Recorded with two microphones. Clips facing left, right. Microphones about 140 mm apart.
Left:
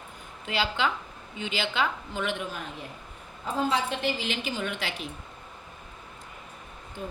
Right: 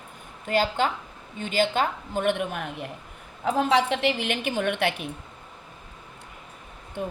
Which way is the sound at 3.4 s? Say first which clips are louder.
Right 5 dB; 75° right (ahead or behind).